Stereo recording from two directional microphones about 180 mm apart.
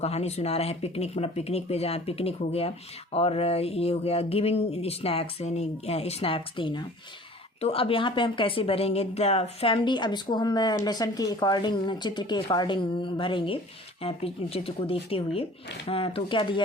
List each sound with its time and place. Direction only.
0.0 s speech: 35° left (ahead or behind)